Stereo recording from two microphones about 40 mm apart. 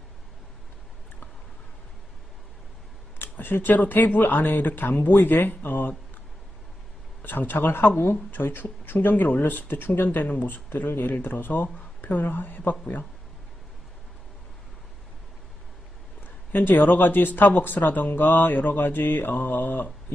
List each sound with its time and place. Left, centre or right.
3.2 s speech: left
7.2 s speech: left
10.2 s speech: left
10.9 s speech: left
16.5 s speech: left